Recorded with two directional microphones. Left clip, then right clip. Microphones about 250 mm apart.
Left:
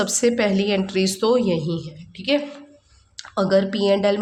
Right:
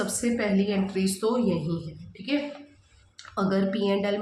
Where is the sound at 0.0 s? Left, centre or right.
Left.